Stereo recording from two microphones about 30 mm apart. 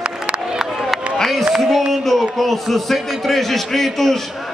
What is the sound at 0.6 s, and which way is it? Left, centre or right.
Run, centre.